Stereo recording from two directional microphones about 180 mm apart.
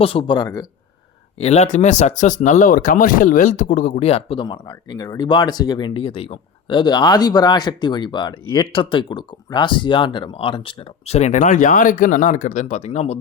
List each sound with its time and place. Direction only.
0.0 s speech: 30° left (ahead or behind)
1.4 s speech: 35° left (ahead or behind)